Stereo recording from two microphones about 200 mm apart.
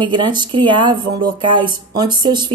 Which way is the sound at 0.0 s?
20° right (ahead or behind).